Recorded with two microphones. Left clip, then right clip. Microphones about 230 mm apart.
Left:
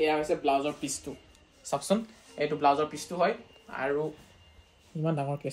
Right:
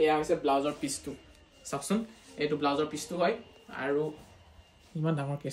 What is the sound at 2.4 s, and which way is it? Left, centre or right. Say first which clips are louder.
Speech: left 4 dB; centre.